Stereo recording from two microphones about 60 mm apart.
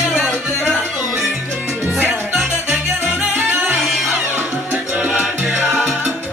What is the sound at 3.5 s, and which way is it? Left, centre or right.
Music, right.